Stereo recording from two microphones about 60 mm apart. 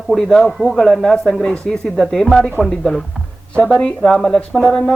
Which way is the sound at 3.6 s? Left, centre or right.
Centre.